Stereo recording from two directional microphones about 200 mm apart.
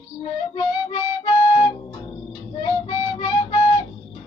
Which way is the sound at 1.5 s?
20° left (ahead or behind).